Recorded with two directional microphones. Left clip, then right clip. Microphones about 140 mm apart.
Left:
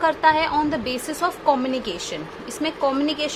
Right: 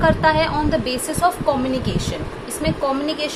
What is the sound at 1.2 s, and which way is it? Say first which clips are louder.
Speech: right 2 dB; 50° left (ahead or behind).